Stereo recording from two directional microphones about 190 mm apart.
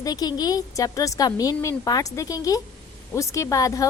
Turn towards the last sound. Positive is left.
turn(degrees=15)  # may be behind; listen again after turning